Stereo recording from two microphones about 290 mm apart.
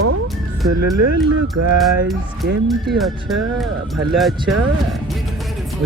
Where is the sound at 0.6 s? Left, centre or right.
Right.